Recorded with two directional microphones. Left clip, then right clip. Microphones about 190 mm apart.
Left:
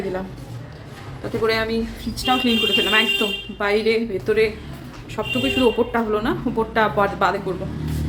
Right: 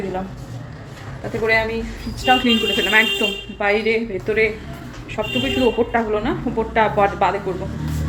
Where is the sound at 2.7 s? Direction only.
5° left (ahead or behind).